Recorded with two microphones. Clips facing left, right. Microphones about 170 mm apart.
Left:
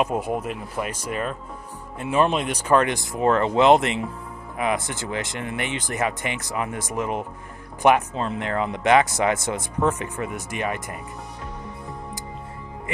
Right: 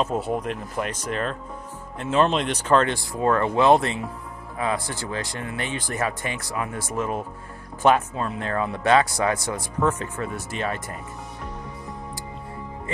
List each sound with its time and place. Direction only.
0.0 s speech: 10° left (ahead or behind)